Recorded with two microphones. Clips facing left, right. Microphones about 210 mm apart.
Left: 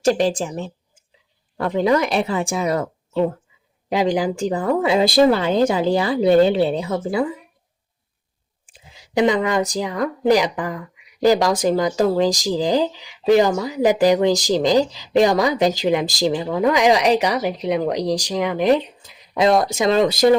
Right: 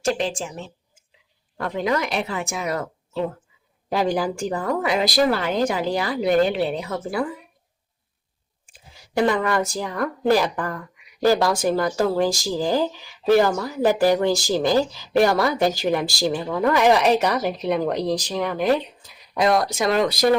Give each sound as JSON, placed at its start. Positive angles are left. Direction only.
{"t": 0.0, "sound": "a woman's voice", "side_deg": 40}
{"t": 3.8, "sound": "speech", "side_deg": 20}
{"t": 9.1, "sound": "speech", "side_deg": 15}